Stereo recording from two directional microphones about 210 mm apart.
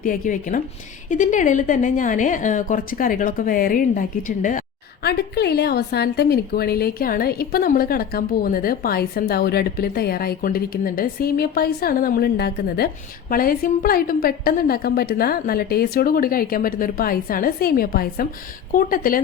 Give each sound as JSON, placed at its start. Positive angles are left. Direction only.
{"t": 0.0, "sound": "a woman's voice", "side_deg": 40}
{"t": 5.0, "sound": "a woman's voice", "side_deg": 50}